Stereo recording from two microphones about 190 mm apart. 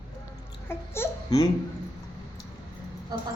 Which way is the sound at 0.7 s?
15° left (ahead or behind).